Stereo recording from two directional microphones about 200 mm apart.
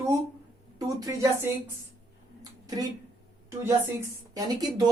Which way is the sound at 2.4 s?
20° right (ahead or behind).